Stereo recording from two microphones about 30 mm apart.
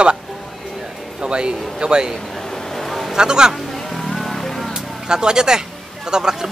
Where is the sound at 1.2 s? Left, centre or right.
Right.